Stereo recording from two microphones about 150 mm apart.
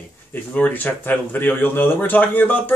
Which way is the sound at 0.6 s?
10° left (ahead or behind).